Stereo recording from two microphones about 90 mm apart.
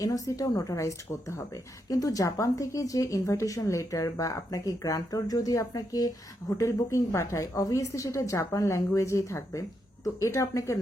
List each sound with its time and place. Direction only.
0.0 s speech: 40° left (ahead or behind)